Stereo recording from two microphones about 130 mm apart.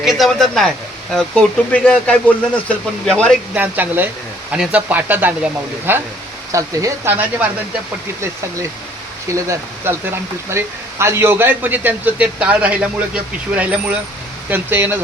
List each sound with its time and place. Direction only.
0.0 s speech: centre (ahead or behind)
3.5 s a man's voice: 15° right (ahead or behind)
9.3 s a man's voice: 20° right (ahead or behind)